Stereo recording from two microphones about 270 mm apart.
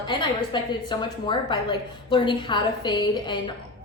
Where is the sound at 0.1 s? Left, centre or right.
Centre.